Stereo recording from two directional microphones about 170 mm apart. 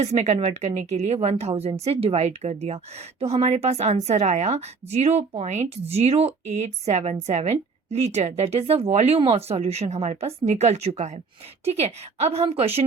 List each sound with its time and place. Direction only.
0.0 s speech: 40° right (ahead or behind)